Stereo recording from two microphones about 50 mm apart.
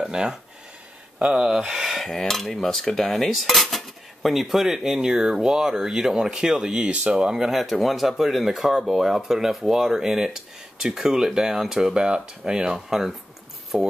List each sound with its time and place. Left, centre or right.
0.0 s speech: centre
1.2 s cutlery: centre
6.9 s speech: right
7.6 s speech: centre